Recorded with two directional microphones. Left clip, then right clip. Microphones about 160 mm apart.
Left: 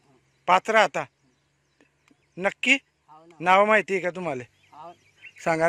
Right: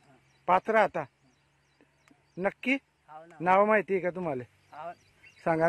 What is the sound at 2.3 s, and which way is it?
Speech, 5° left (ahead or behind).